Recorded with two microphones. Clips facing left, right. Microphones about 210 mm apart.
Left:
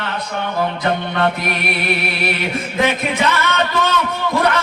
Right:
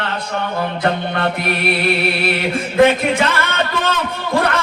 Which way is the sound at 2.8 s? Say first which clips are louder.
Right 5 dB; 55° right (ahead or behind).